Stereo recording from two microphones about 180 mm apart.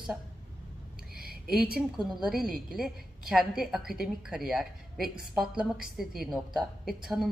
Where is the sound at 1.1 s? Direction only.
60° right (ahead or behind).